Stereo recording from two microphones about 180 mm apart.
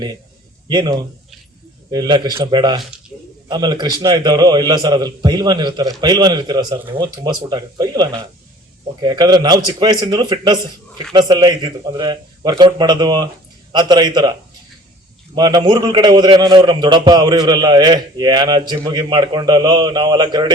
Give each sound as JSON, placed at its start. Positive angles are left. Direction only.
{"t": 0.7, "sound": "a man's voice", "side_deg": -20}
{"t": 15.4, "sound": "a man's voice", "side_deg": -25}